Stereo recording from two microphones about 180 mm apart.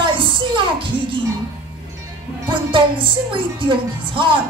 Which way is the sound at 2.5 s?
25° right (ahead or behind).